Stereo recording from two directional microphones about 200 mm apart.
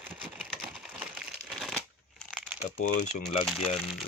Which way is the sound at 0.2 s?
5° right (ahead or behind).